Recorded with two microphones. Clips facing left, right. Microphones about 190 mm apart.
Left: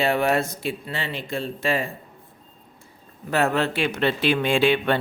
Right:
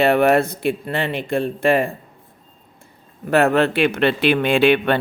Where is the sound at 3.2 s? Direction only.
60° right (ahead or behind).